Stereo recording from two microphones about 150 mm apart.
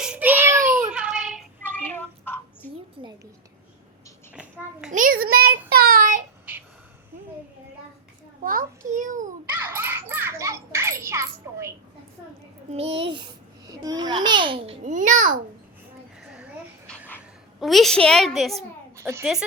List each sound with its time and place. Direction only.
0.0 s a sound: 10° right (ahead or behind)
0.7 s child singing: 5° right (ahead or behind)
1.6 s a sound: 10° left (ahead or behind)
3.0 s a sound: 35° right (ahead or behind)
4.9 s child singing: 65° right (ahead or behind)
8.9 s a sound: 55° right (ahead or behind)
9.5 s children playing: 15° right (ahead or behind)
12.7 s a child's voice: 40° right (ahead or behind)
13.7 s babbling: 25° right (ahead or behind)
14.8 s babbling: 60° right (ahead or behind)
17.6 s a child's voice: centre (ahead or behind)
18.9 s a woman's voice: 15° right (ahead or behind)